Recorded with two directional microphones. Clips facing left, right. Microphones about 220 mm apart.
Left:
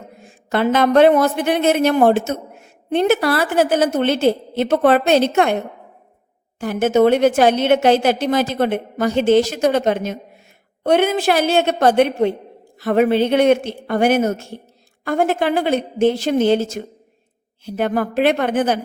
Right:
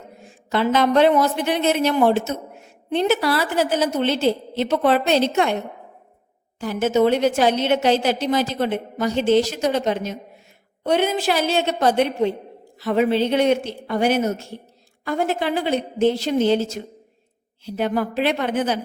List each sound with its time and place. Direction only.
0.3 s a woman's voice: 55° left (ahead or behind)
6.6 s a woman's voice: 55° left (ahead or behind)